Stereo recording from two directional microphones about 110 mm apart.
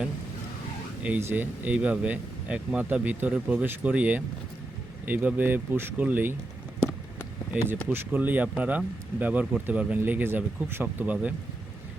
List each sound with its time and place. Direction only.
1.0 s speech: 15° right (ahead or behind)
7.9 s speech: 15° right (ahead or behind)